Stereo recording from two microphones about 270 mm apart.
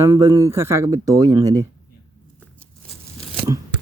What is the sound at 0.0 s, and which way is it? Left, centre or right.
Speech, centre.